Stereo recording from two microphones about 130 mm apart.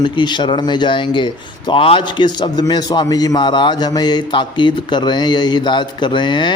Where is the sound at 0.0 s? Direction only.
35° left (ahead or behind).